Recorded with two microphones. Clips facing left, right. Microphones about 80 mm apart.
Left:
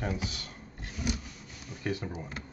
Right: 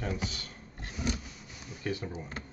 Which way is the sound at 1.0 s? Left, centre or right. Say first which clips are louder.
Even; centre.